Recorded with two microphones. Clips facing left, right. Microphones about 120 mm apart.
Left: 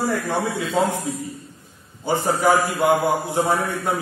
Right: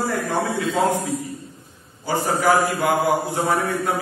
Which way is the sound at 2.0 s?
20° left (ahead or behind).